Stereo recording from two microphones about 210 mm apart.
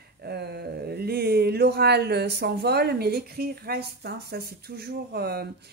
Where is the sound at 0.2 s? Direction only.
50° right (ahead or behind).